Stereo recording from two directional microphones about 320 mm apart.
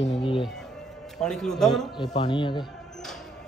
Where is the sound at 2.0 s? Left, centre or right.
Centre.